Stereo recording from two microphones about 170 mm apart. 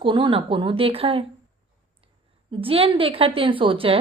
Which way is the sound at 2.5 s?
35° right (ahead or behind).